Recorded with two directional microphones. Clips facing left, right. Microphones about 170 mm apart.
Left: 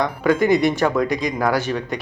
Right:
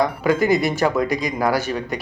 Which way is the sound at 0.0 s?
5° right (ahead or behind).